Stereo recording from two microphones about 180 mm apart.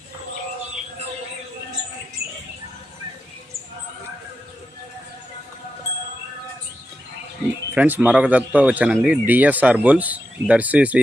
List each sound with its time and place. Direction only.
2.2 s mouse: 60° right (ahead or behind)
7.8 s speech: 10° right (ahead or behind)